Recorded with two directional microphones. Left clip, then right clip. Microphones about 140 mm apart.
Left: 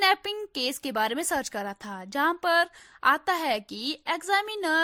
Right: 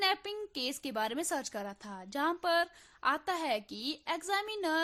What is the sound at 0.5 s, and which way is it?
A woman's voice, 40° left (ahead or behind).